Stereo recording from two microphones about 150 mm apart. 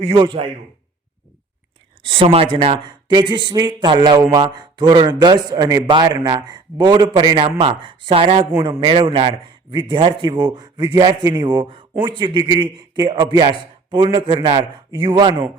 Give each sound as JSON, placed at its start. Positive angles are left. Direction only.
{"t": 0.0, "sound": "a man's voice", "side_deg": -35}
{"t": 2.0, "sound": "a man's voice", "side_deg": -40}